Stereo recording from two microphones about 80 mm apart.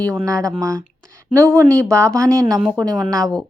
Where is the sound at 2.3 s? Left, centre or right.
Right.